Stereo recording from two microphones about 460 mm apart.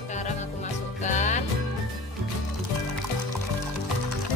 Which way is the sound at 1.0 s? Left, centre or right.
Centre.